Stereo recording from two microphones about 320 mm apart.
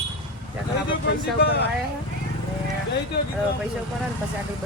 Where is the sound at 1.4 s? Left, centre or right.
Left.